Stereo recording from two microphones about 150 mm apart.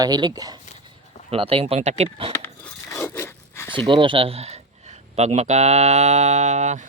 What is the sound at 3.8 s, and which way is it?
Speech, 35° right (ahead or behind).